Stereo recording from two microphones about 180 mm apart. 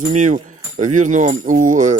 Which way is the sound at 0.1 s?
45° right (ahead or behind).